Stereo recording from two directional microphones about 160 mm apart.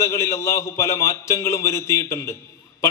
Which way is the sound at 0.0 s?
15° left (ahead or behind).